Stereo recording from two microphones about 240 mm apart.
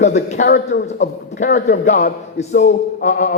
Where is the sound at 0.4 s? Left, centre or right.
Left.